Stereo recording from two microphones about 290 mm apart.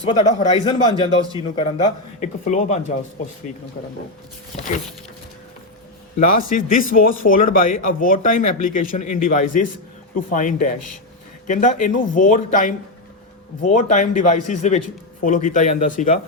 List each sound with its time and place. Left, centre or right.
0.0 s a man's voice: left
6.1 s a man's voice: left